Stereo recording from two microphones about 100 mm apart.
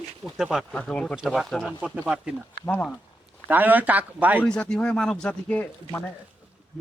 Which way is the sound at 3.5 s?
15° right (ahead or behind).